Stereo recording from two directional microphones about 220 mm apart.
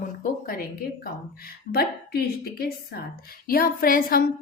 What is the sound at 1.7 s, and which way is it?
A woman's voice, 45° left (ahead or behind).